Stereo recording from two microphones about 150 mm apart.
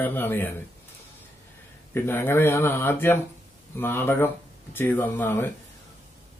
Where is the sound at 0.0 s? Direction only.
15° left (ahead or behind).